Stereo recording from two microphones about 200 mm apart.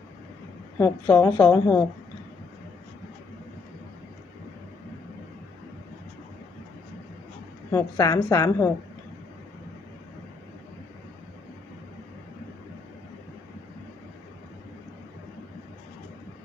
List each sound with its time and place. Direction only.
0.8 s a woman's voice: 15° left (ahead or behind)
7.7 s a woman's voice: 15° left (ahead or behind)